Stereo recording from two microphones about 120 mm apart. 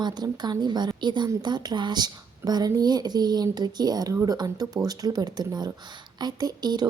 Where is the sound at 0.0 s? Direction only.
35° right (ahead or behind).